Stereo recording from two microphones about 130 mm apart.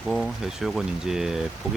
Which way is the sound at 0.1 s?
Centre (ahead or behind).